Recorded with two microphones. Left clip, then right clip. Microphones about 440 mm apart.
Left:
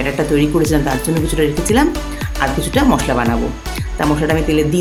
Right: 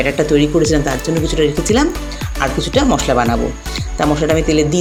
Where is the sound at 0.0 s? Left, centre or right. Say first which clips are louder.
Right 2 dB; left.